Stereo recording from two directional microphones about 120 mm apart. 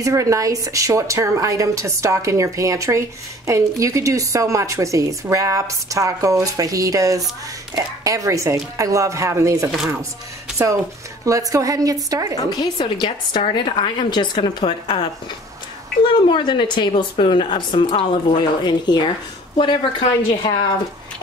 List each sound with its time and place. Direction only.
0.0 s a woman's voice: 25° right (ahead or behind)
11.2 s a woman's voice: 30° right (ahead or behind)
12.4 s a woman's voice: 35° left (ahead or behind)
16.3 s a woman's voice: 40° left (ahead or behind)